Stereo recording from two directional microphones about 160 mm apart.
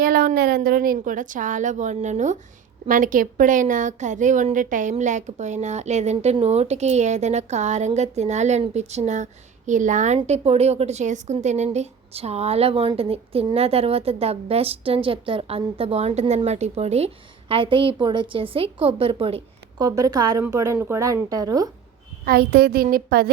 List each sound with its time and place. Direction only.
0.0 s a woman's voice: 65° right (ahead or behind); by 19.4 s 35° right (ahead or behind)
19.8 s a woman's voice: 25° right (ahead or behind)
22.2 s a child's voice: 75° right (ahead or behind)